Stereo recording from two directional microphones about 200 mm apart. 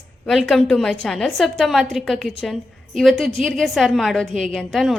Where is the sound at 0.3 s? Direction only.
Centre (ahead or behind).